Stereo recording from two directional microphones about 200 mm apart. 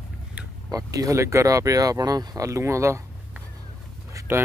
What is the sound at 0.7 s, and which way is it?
Speech, 15° right (ahead or behind).